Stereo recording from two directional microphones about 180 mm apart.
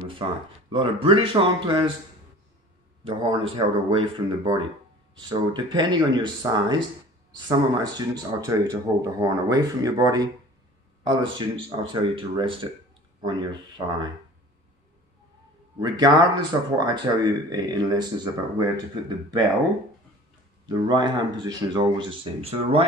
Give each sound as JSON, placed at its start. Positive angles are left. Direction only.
{"t": 0.2, "sound": "speech", "side_deg": -25}
{"t": 3.1, "sound": "speech", "side_deg": -30}
{"t": 15.8, "sound": "speech", "side_deg": -20}
{"t": 20.6, "sound": "speech", "side_deg": -25}